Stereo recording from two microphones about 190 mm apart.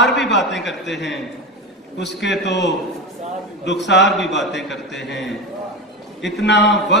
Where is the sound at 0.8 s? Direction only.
65° left (ahead or behind).